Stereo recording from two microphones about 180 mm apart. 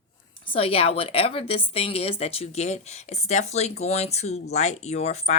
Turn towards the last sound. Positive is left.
turn(degrees=35)  # may be behind; listen again after turning